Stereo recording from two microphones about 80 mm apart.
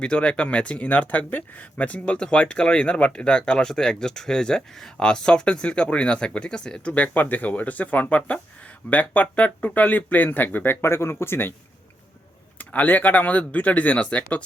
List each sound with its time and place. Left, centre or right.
0.0 s speech: centre; by 11.5 s left
12.5 s speech: left